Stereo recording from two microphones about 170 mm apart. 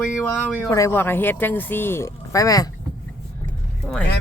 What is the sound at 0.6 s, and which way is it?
Speech, 15° left (ahead or behind).